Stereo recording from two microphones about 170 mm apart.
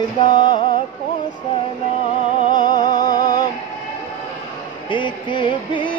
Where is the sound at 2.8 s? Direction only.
25° left (ahead or behind).